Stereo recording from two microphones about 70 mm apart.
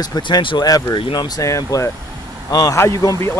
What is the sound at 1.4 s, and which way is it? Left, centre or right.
Speech, left.